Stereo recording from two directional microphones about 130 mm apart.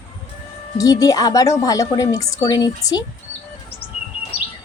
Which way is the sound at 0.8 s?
25° left (ahead or behind).